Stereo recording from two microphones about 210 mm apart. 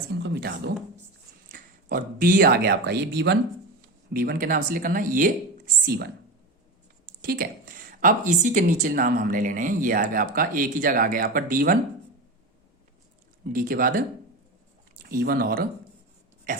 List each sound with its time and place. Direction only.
0.2 s a sound: 50° right (ahead or behind)
1.5 s speech: 40° right (ahead or behind)
7.2 s speech: 45° right (ahead or behind)
13.5 s speech: 40° right (ahead or behind)
15.1 s speech: 45° right (ahead or behind)